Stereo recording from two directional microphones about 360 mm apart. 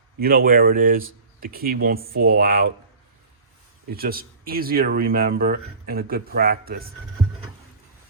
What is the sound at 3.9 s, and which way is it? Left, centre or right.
Speech, right.